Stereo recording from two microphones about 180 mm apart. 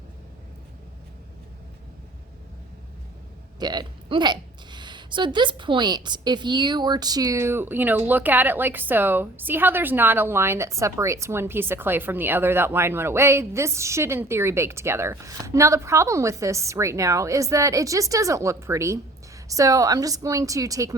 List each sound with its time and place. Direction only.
3.6 s a woman's voice: 25° right (ahead or behind)